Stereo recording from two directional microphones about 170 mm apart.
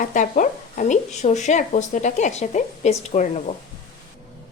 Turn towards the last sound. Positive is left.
turn(degrees=40)  # may be behind; listen again after turning